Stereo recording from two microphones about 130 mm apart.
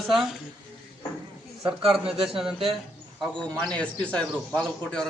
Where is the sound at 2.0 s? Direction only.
45° right (ahead or behind).